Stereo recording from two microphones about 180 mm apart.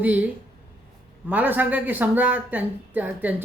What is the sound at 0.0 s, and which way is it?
Speech, 10° right (ahead or behind).